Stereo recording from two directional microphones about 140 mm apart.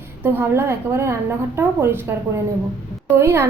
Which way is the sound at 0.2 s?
15° right (ahead or behind).